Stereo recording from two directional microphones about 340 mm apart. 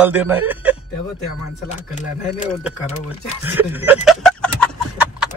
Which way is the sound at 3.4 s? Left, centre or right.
Centre.